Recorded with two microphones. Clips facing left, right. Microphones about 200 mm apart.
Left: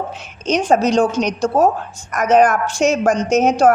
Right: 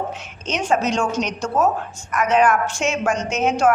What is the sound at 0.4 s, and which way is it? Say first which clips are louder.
A woman's voice: left 6 dB; 35° left (ahead or behind).